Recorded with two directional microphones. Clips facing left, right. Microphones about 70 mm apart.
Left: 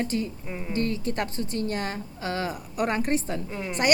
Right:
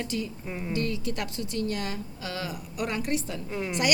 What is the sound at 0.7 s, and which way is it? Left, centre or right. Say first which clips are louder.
A woman's voice: left 4 dB; left.